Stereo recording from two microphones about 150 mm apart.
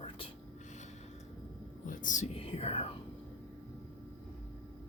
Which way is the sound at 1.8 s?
60° left (ahead or behind).